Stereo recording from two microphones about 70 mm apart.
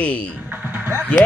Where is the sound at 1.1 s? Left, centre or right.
Centre.